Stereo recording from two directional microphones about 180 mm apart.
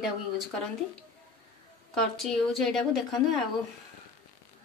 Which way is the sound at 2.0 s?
5° left (ahead or behind).